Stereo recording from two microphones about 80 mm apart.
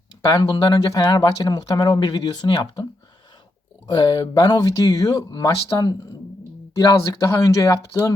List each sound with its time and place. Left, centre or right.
0.3 s speech: left
3.8 s speech: left
6.7 s speech: left